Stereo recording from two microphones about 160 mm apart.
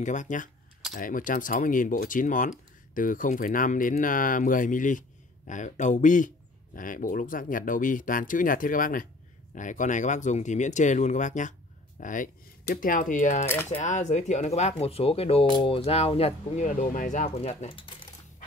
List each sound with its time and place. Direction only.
0.0 s speech: 50° left (ahead or behind); by 17.9 s 35° left (ahead or behind)